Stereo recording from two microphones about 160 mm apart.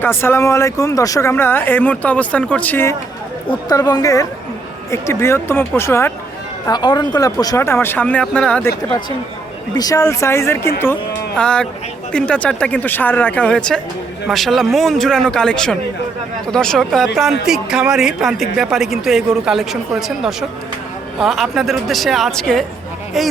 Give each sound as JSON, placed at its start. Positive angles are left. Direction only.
{"t": 0.0, "sound": "speech", "side_deg": 15}
{"t": 3.7, "sound": "a woman's voice", "side_deg": 25}
{"t": 6.7, "sound": "speech", "side_deg": 25}
{"t": 9.7, "sound": "a man's voice", "side_deg": 20}